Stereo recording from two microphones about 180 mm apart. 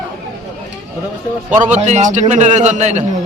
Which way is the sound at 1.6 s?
40° right (ahead or behind).